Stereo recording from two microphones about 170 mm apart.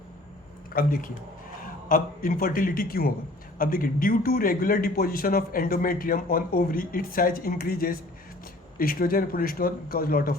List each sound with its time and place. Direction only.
0.7 s a man's voice: 60° left (ahead or behind)